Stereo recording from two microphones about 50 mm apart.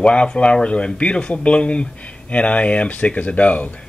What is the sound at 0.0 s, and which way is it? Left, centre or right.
A man's voice, left.